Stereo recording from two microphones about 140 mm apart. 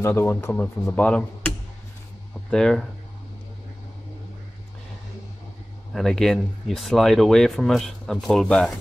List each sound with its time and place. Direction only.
0.0 s speech: 15° left (ahead or behind)
2.5 s speech: 5° left (ahead or behind)
5.9 s speech: 5° left (ahead or behind)